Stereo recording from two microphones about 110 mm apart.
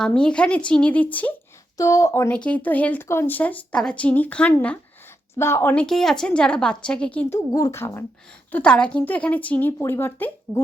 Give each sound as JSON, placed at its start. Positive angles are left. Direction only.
{"t": 0.0, "sound": "speech", "side_deg": 5}
{"t": 1.8, "sound": "speech", "side_deg": 30}
{"t": 2.3, "sound": "speech", "side_deg": 10}
{"t": 5.3, "sound": "speech", "side_deg": 25}
{"t": 5.7, "sound": "speech", "side_deg": 5}
{"t": 7.3, "sound": "speech", "side_deg": 30}
{"t": 8.5, "sound": "speech", "side_deg": 10}